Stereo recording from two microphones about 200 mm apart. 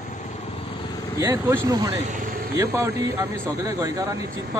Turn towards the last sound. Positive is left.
turn(degrees=-15)  # may be behind; listen again after turning